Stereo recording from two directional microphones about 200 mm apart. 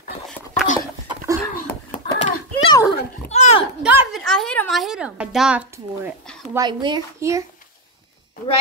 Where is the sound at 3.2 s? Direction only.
35° left (ahead or behind).